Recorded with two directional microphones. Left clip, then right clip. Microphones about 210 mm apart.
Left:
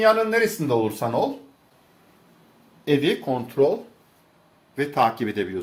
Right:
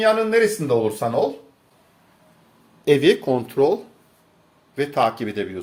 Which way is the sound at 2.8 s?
35° right (ahead or behind).